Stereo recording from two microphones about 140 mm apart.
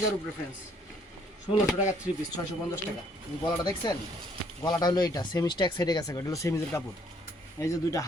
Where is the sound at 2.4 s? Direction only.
25° left (ahead or behind).